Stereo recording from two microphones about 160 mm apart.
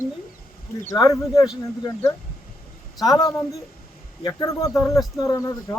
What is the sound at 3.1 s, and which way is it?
Speech, 25° left (ahead or behind).